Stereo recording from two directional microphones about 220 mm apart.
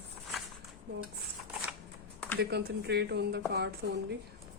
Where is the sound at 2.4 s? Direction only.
45° right (ahead or behind).